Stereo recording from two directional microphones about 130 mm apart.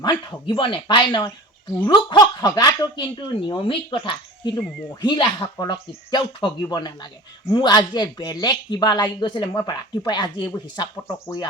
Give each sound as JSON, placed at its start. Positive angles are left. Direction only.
{"t": 0.0, "sound": "speech", "side_deg": 35}